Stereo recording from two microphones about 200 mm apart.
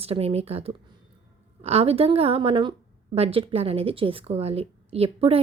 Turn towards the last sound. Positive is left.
turn(degrees=-30)  # may be behind; listen again after turning